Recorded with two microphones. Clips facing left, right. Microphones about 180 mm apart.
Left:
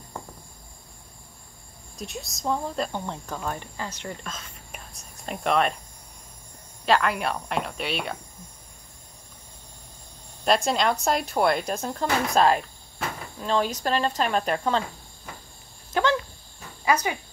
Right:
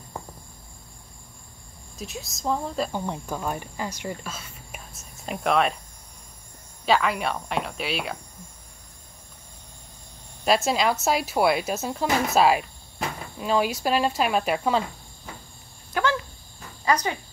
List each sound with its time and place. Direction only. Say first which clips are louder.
2.0 s speech: even; centre (ahead or behind)
6.9 s speech: even; centre (ahead or behind)
10.4 s speech: right 1 dB; 5° right (ahead or behind)
15.9 s dog: left 2 dB; 20° left (ahead or behind)
16.8 s speech: even; 10° left (ahead or behind)